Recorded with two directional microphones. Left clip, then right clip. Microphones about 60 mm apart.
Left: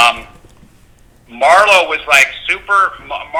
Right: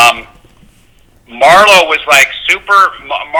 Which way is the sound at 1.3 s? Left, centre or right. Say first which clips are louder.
Right 4 dB; right.